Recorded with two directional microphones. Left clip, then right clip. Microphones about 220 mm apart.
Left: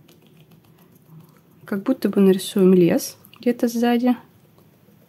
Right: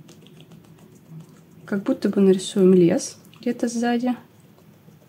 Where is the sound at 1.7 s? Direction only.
25° left (ahead or behind).